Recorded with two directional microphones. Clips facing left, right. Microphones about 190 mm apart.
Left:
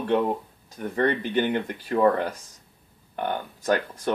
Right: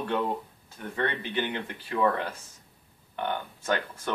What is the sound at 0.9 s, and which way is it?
Speech, 45° left (ahead or behind).